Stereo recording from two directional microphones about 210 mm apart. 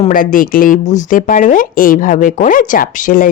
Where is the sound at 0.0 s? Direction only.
40° left (ahead or behind).